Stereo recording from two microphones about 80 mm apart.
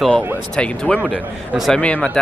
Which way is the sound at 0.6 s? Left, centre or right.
Centre.